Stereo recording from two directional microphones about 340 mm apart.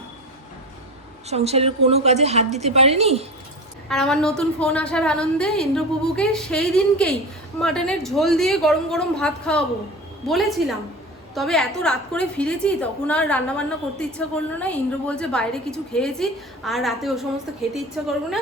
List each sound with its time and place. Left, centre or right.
1.3 s a woman's voice: centre
3.8 s a woman's voice: centre